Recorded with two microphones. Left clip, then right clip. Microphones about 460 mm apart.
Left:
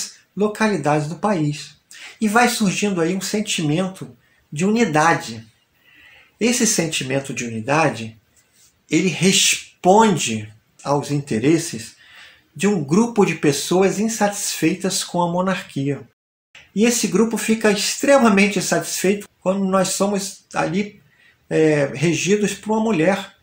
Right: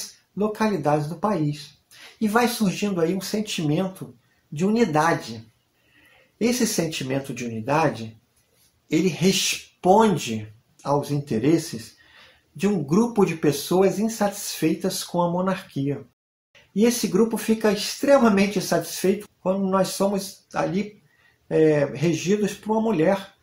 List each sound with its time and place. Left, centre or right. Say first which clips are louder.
0.4 s speech: left 4 dB; right
6.3 s speech: left 4 dB; right